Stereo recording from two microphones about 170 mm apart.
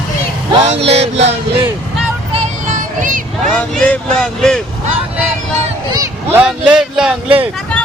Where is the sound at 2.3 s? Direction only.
45° right (ahead or behind).